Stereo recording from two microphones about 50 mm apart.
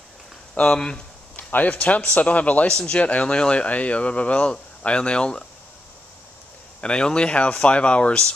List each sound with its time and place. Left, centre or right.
0.6 s speech: centre
1.3 s a man's voice: left
6.8 s a man's voice: centre